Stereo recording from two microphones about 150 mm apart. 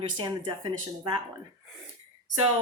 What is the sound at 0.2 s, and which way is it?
Speech, 30° right (ahead or behind).